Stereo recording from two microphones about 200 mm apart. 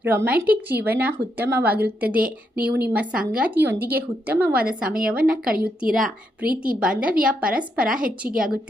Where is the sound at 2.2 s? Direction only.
45° right (ahead or behind).